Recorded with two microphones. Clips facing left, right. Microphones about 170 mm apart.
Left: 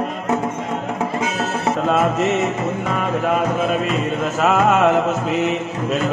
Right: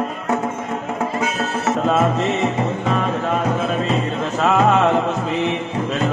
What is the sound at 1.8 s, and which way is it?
Music, centre (ahead or behind).